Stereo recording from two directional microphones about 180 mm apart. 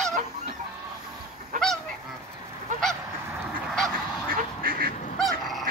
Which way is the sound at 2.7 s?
45° right (ahead or behind).